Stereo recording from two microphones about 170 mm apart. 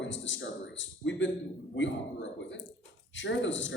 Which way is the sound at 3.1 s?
90° left.